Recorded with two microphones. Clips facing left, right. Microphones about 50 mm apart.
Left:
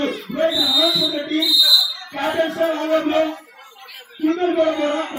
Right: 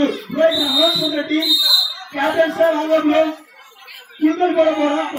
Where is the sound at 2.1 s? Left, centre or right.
Right.